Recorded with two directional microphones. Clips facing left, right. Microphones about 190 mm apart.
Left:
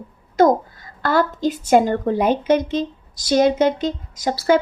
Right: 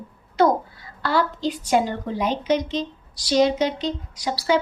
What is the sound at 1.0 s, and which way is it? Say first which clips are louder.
A woman's voice: left 4 dB; 50° left (ahead or behind).